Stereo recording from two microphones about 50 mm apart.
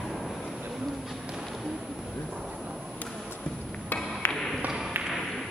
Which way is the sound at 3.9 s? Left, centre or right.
Left.